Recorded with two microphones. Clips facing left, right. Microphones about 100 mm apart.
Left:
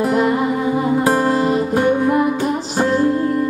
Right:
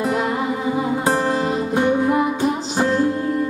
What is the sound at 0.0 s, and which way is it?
Music, centre (ahead or behind).